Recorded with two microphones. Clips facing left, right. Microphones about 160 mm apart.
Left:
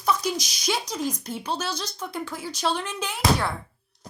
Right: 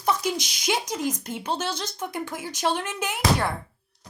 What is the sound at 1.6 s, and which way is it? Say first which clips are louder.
Speech: right 1 dB; 25° right (ahead or behind).